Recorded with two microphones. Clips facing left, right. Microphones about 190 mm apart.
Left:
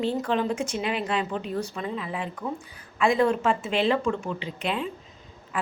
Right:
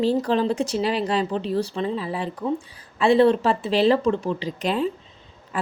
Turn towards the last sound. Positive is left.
turn(degrees=-40)  # may be behind; listen again after turning